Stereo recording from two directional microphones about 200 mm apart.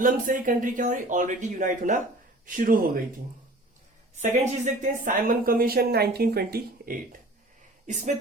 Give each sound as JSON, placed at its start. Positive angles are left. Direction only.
{"t": 0.0, "sound": "speech", "side_deg": -40}
{"t": 4.1, "sound": "speech", "side_deg": -35}